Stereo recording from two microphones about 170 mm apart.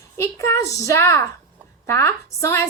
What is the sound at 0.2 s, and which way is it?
A woman's voice, 15° left (ahead or behind).